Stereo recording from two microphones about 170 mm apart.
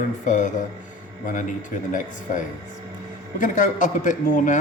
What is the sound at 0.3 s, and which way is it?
Speech, 45° left (ahead or behind).